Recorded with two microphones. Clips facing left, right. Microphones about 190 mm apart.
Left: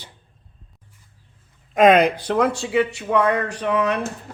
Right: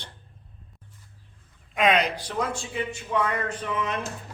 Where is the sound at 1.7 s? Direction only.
45° left (ahead or behind).